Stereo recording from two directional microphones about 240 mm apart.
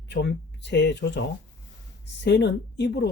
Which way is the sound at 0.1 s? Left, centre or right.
Left.